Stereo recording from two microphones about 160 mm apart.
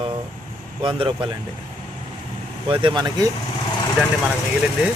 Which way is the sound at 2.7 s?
30° right (ahead or behind).